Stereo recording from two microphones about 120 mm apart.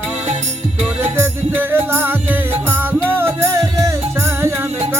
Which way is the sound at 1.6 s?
20° right (ahead or behind).